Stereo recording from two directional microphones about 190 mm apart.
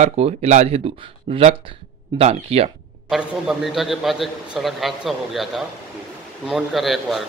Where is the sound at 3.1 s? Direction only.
Centre (ahead or behind).